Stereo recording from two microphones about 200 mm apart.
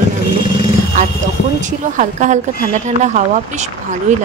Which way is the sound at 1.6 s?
40° right (ahead or behind).